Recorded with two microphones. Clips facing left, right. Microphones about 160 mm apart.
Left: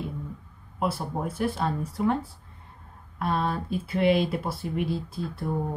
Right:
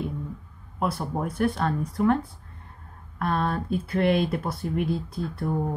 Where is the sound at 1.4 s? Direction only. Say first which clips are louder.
Right 3 dB; 25° left (ahead or behind).